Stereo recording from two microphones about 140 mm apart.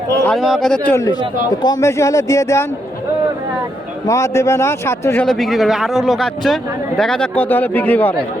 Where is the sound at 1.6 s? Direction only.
20° left (ahead or behind).